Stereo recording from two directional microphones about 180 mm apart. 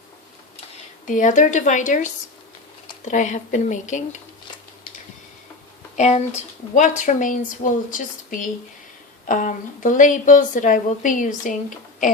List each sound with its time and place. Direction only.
1.0 s a woman's voice: 45° left (ahead or behind)
6.0 s a woman's voice: 35° left (ahead or behind)